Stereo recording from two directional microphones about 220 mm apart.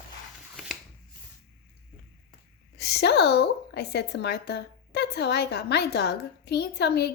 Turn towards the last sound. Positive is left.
turn(degrees=50)  # may be behind; listen again after turning